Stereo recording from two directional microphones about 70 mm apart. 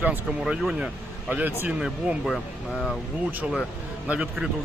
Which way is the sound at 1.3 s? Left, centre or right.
Right.